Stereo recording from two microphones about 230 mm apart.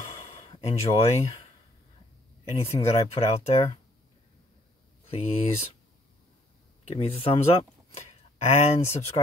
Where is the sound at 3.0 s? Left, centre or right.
Left.